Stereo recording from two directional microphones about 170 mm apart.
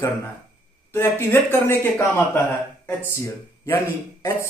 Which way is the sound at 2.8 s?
15° left (ahead or behind).